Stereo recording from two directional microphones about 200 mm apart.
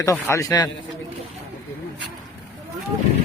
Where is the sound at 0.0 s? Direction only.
15° left (ahead or behind).